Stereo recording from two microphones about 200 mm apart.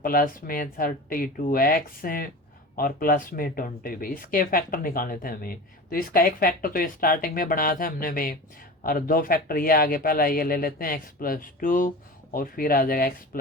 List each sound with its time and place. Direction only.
0.0 s speech: 45° left (ahead or behind)